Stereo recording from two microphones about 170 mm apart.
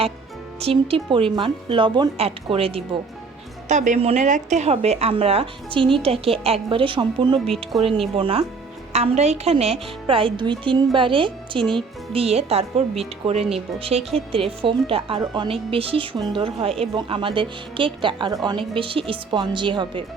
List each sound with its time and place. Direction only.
0.6 s a woman's voice: 35° right (ahead or behind)
3.7 s a woman's voice: 45° right (ahead or behind); by 7.3 s 30° right (ahead or behind)
7.4 s speech: centre (ahead or behind)
8.1 s a woman's voice: 35° right (ahead or behind)